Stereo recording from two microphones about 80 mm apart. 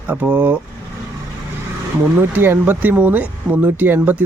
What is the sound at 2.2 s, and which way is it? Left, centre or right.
Speech, right.